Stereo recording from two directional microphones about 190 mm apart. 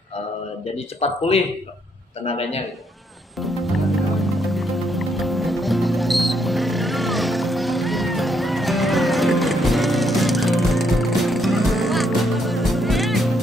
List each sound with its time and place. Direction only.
0.7 s speech: 35° left (ahead or behind)
3.3 s music: centre (ahead or behind)